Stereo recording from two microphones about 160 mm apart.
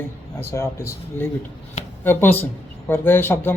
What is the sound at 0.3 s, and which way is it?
Speech, 15° left (ahead or behind).